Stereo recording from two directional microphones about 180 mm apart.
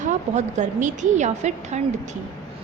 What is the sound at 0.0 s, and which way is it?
A woman's voice, 40° right (ahead or behind).